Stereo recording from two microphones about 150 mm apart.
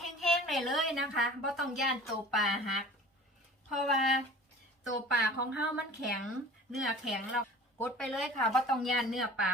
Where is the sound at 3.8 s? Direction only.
Centre (ahead or behind).